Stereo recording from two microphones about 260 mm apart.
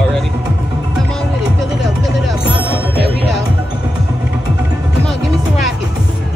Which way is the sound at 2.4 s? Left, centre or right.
Centre.